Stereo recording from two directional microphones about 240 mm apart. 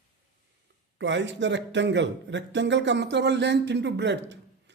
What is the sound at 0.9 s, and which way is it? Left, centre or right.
Speech, right.